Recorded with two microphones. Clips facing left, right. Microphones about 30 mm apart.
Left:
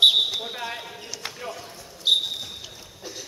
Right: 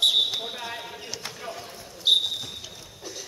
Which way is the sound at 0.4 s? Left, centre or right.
Centre.